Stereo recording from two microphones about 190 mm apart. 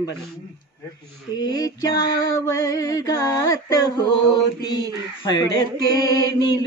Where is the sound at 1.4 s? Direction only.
20° left (ahead or behind).